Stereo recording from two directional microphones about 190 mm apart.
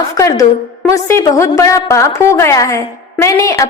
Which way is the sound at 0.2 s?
20° left (ahead or behind).